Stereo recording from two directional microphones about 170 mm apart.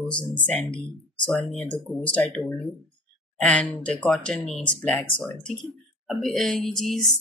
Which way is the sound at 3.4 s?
5° left (ahead or behind).